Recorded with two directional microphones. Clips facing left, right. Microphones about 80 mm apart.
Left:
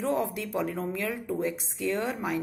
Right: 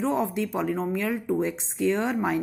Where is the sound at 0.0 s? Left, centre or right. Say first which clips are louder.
Right 3 dB; right.